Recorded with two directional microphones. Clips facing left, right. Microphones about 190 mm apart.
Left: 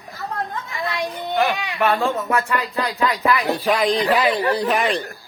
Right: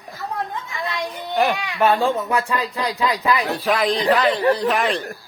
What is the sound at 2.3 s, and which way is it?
Speech, 15° right (ahead or behind).